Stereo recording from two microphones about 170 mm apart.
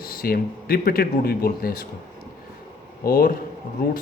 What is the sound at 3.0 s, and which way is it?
Speech, 60° left (ahead or behind).